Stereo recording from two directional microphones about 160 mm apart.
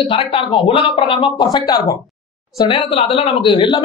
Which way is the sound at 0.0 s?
30° left (ahead or behind).